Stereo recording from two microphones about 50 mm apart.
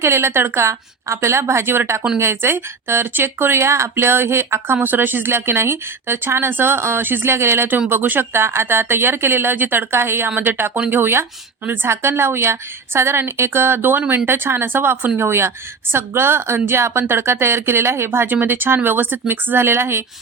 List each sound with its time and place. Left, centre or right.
0.0 s speech: right
4.8 s speech: right
7.9 s speech: right
9.9 s speech: right
10.3 s speech: right
11.9 s speech: right
18.3 s speech: right